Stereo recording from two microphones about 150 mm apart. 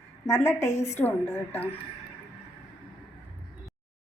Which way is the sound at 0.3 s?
20° left (ahead or behind).